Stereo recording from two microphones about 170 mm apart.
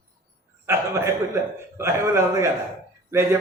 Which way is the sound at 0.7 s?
15° right (ahead or behind).